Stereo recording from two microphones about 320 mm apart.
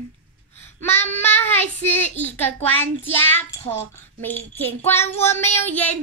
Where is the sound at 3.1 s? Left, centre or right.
Centre.